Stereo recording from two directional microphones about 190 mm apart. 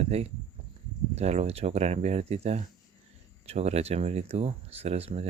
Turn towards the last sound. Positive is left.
turn(degrees=-35)  # may be behind; listen again after turning